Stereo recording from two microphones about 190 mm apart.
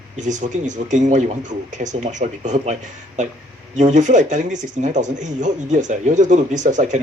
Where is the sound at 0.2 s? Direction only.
40° right (ahead or behind).